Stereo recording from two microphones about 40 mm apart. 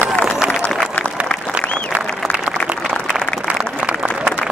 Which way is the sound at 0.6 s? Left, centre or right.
Left.